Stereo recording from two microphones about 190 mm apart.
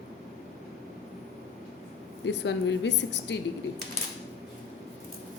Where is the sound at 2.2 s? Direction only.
70° left (ahead or behind).